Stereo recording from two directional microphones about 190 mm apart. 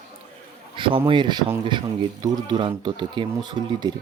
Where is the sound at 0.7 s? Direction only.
25° right (ahead or behind).